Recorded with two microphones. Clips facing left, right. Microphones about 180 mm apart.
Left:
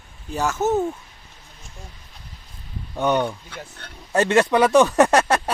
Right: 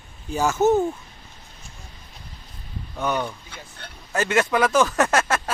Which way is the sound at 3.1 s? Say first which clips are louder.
Left 5 dB; 30° left (ahead or behind).